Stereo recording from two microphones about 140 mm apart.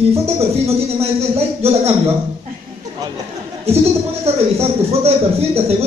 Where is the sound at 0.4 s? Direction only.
45° right (ahead or behind).